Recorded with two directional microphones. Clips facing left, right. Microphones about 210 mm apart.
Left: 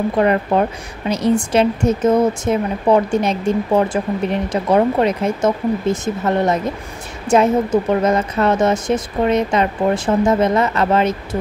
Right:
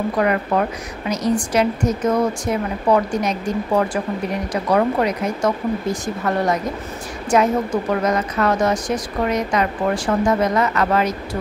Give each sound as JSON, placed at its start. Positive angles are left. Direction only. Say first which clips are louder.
{"t": 0.2, "sound": "a woman's voice", "louder": "left 4 dB", "side_deg": 30}